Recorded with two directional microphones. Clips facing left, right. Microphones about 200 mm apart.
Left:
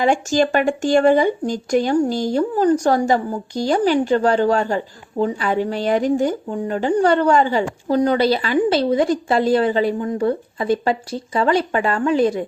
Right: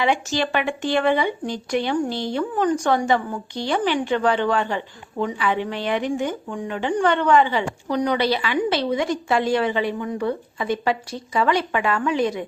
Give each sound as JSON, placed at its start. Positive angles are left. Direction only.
{"t": 0.0, "sound": "speech", "side_deg": 45}
{"t": 8.9, "sound": "speech", "side_deg": 30}